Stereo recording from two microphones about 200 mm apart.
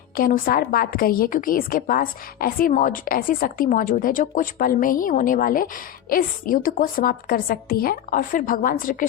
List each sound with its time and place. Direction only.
0.2 s a woman's voice: 45° left (ahead or behind)